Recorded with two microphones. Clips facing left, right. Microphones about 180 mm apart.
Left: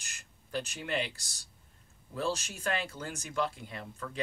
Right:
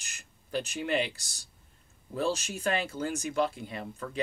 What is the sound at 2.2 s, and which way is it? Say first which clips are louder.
Speech: right 4 dB; 20° right (ahead or behind).